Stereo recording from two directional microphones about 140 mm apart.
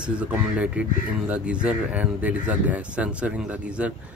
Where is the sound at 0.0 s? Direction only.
10° right (ahead or behind).